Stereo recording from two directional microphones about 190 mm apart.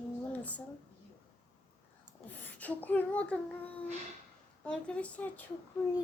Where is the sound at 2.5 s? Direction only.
10° left (ahead or behind).